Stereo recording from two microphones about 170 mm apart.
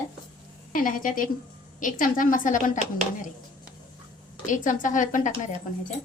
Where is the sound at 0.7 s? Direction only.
55° left (ahead or behind).